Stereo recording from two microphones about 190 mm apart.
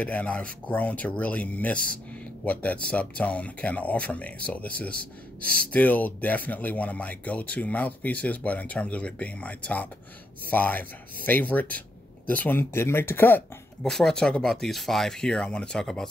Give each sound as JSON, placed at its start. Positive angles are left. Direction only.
{"t": 0.0, "sound": "speech", "side_deg": 5}
{"t": 4.9, "sound": "speech", "side_deg": -50}
{"t": 5.7, "sound": "speech", "side_deg": 10}